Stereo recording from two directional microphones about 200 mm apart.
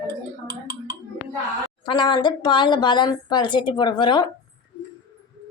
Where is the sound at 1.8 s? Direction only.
20° left (ahead or behind).